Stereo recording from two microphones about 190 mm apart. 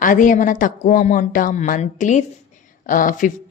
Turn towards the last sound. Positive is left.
turn(degrees=45)  # may be behind; listen again after turning